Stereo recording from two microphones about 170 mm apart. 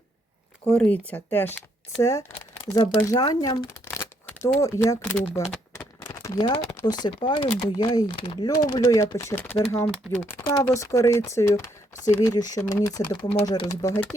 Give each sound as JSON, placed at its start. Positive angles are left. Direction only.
{"t": 0.8, "sound": "speech", "side_deg": 10}
{"t": 5.8, "sound": "a sound", "side_deg": 20}
{"t": 6.7, "sound": "speech", "side_deg": 25}